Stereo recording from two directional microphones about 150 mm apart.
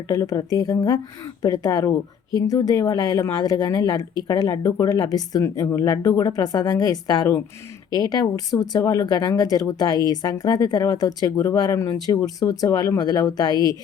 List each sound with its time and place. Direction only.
0.1 s speech: 25° left (ahead or behind)